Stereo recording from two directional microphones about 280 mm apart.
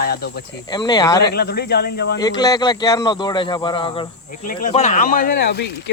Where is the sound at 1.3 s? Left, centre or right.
Left.